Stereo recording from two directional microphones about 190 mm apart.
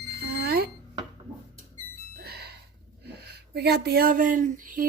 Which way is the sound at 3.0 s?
60° right (ahead or behind).